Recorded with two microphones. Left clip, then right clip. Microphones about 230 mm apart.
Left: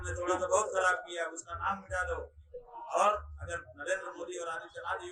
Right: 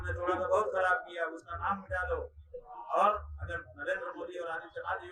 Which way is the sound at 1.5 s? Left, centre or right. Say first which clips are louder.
Left 1 dB; left.